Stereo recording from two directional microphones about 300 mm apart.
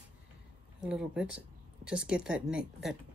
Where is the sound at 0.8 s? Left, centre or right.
Centre.